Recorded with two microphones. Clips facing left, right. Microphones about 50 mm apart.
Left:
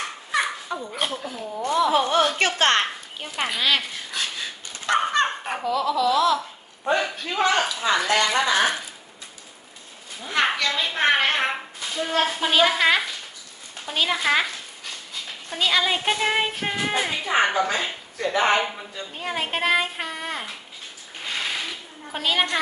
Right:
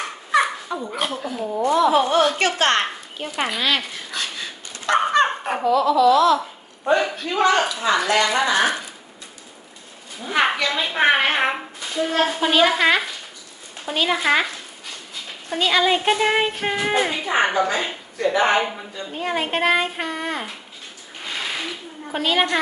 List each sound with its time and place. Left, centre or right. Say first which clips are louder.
0.3 s a sound: right 6 dB; centre
1.1 s speech: right 4 dB; centre
1.5 s a woman's voice: right 7 dB; centre
1.9 s a woman's voice: right 3 dB; right
3.2 s dog: right 3 dB; centre
6.8 s speech: right 4 dB; centre
7.9 s a woman's voice: right 2 dB; right
8.3 s speech: right 2 dB; centre
10.2 s a woman's voice: right 3 dB; centre
22.1 s speech: right 3 dB; centre